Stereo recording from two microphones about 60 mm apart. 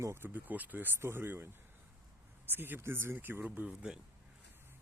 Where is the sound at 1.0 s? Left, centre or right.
Right.